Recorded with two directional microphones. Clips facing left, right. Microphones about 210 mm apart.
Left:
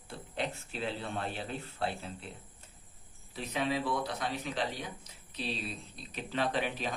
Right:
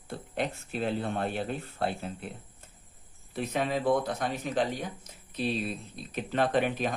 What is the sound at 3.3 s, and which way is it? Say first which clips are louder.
Speech: right 4 dB; 50° right (ahead or behind).